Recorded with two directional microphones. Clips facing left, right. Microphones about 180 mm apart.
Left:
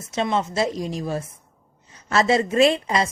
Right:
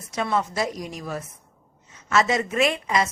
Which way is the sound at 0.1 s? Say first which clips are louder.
Left 2 dB; 25° left (ahead or behind).